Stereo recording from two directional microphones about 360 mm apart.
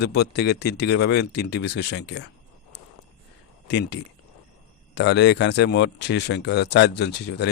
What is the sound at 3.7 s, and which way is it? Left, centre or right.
Speech, left.